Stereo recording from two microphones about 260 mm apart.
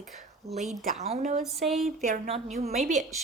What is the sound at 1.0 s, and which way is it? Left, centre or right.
A woman's voice, right.